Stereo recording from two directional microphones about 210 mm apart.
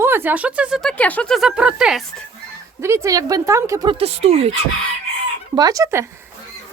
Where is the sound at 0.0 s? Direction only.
10° right (ahead or behind).